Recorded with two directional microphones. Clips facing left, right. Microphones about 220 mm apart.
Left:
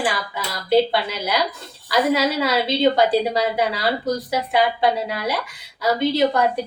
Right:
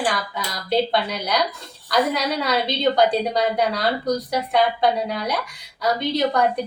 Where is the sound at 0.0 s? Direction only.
5° left (ahead or behind).